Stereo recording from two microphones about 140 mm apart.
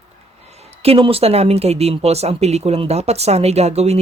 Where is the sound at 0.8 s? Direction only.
40° right (ahead or behind).